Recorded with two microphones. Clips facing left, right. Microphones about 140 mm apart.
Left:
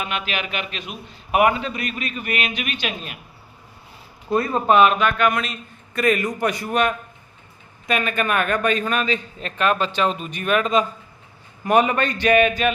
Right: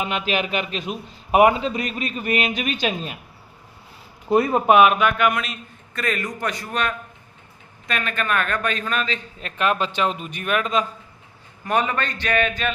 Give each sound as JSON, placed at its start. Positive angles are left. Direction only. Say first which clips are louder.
{"t": 0.0, "sound": "a man's voice", "louder": "right 3 dB", "side_deg": -30}
{"t": 4.3, "sound": "speech", "louder": "right 2 dB", "side_deg": -20}
{"t": 5.9, "sound": "a man's voice", "louder": "left 6 dB", "side_deg": 10}
{"t": 9.4, "sound": "speech", "louder": "even", "side_deg": -10}
{"t": 11.6, "sound": "a man's voice", "louder": "left 5 dB", "side_deg": 15}